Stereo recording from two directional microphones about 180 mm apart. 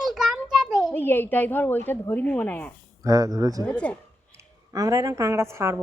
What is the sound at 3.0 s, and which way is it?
Speech, 20° right (ahead or behind).